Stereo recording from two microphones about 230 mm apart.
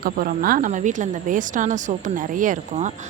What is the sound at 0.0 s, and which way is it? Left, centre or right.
A woman's voice, right.